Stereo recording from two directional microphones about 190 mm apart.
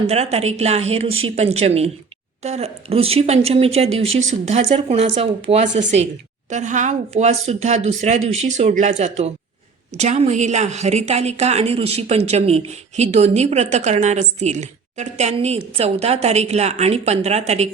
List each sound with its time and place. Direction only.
0.1 s a woman's voice: 35° right (ahead or behind)